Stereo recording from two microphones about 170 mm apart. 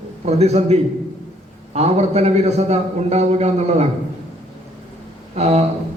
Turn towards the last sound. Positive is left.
turn(degrees=-40)  # may be behind; listen again after turning